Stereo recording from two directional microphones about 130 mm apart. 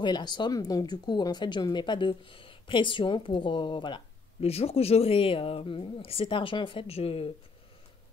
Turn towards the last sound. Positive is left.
turn(degrees=50)  # may be behind; listen again after turning